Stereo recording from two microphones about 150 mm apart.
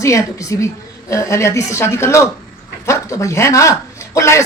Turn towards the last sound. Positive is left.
turn(degrees=20)  # may be behind; listen again after turning